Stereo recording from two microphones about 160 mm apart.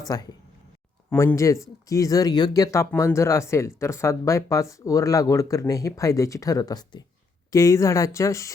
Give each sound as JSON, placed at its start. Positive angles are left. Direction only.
{"t": 0.1, "sound": "speech", "side_deg": 25}